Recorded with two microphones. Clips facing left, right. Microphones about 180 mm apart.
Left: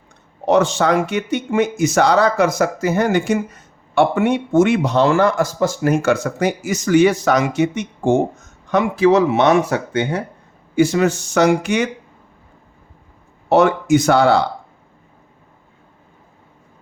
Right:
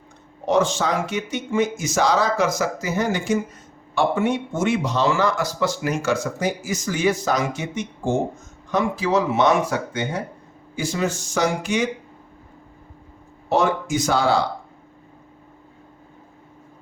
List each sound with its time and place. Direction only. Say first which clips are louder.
0.4 s speech: left 5 dB; 65° left (ahead or behind)
13.5 s speech: left 7 dB; 65° left (ahead or behind)